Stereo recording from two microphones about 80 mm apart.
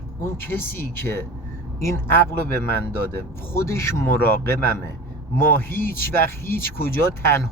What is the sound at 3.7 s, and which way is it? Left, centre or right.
Speech, left.